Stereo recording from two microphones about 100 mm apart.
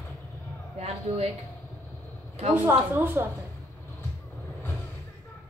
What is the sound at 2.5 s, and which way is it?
Speech, 20° right (ahead or behind).